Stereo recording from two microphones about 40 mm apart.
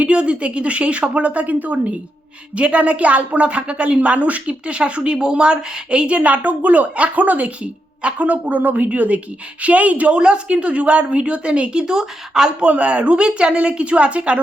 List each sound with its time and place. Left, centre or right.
0.0 s a woman's voice: right
1.5 s a woman's voice: right
2.6 s a woman's voice: right
10.2 s a woman's voice: right
12.5 s a woman's voice: right